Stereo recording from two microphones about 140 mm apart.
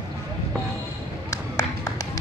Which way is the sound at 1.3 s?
25° left (ahead or behind).